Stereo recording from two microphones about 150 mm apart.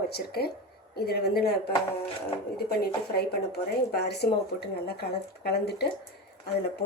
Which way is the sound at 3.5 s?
90° left.